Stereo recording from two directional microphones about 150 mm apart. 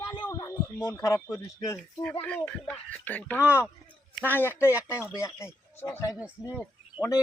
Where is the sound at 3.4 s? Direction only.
10° right (ahead or behind).